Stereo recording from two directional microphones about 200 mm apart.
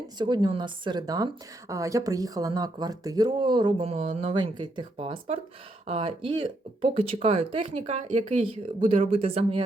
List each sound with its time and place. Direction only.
0.2 s a woman's voice: 20° right (ahead or behind)